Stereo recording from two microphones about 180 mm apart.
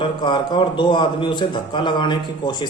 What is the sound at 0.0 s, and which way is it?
A man's voice, 25° left (ahead or behind).